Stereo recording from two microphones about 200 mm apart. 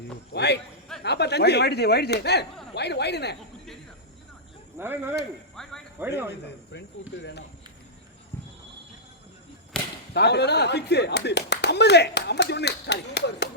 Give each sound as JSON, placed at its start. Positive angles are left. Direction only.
{"t": 0.3, "sound": "speech", "side_deg": 55}
{"t": 4.8, "sound": "speech", "side_deg": -10}
{"t": 5.6, "sound": "speech", "side_deg": 5}
{"t": 6.0, "sound": "speech", "side_deg": -10}
{"t": 7.2, "sound": "speech", "side_deg": 60}
{"t": 9.7, "sound": "whip", "side_deg": 5}
{"t": 10.2, "sound": "speech", "side_deg": 55}